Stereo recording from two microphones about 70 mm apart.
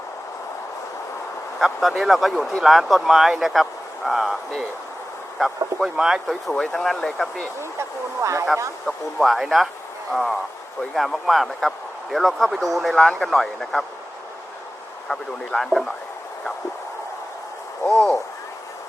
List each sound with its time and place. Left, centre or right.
1.5 s speech: centre
5.8 s speech: centre
6.5 s speech: centre
7.8 s speech: right
8.9 s speech: centre
15.1 s speech: centre
17.8 s speech: centre